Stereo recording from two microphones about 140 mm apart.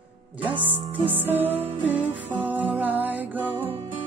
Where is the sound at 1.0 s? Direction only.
15° right (ahead or behind).